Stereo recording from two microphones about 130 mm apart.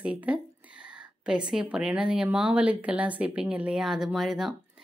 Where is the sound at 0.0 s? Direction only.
10° right (ahead or behind).